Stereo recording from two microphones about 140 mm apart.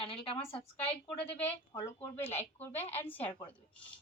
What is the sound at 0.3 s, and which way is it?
Speech, 40° left (ahead or behind).